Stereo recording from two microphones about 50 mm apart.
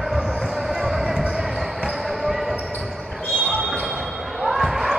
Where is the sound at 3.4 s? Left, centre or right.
Right.